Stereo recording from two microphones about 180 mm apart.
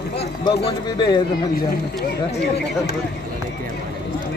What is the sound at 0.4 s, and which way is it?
Speech, 30° left (ahead or behind).